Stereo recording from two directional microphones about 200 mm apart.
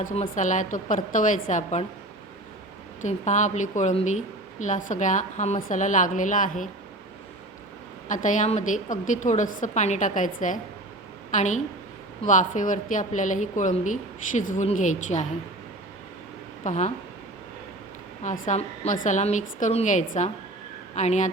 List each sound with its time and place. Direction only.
0.0 s a woman's voice: 40° left (ahead or behind)
3.0 s a woman's voice: 35° left (ahead or behind)
8.0 s a woman's voice: 40° left (ahead or behind)
16.6 s a woman's voice: 35° left (ahead or behind)
18.2 s a woman's voice: 40° left (ahead or behind)